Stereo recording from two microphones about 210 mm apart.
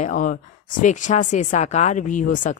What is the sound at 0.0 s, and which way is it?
A woman's voice, 40° left (ahead or behind).